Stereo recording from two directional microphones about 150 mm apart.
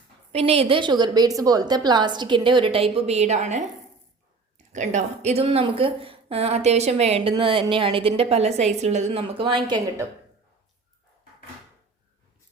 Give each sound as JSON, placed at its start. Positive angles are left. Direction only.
{"t": 0.3, "sound": "speech", "side_deg": -40}